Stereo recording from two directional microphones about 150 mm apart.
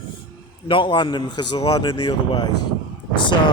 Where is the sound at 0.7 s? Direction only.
35° left (ahead or behind).